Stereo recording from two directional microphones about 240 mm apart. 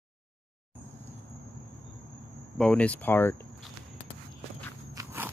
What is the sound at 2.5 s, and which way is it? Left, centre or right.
Speech, centre.